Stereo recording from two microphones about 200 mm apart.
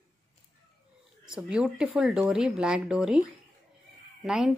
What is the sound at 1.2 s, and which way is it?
Speech, 5° right (ahead or behind).